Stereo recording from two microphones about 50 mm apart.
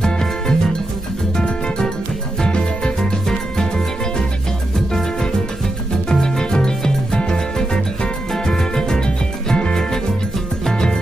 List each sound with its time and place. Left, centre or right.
0.0 s music: centre
6.0 s music: centre